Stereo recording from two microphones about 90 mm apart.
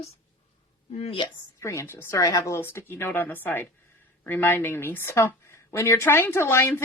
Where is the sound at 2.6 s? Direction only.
25° left (ahead or behind).